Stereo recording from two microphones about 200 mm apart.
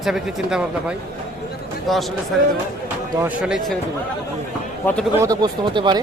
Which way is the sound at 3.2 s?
5° right (ahead or behind).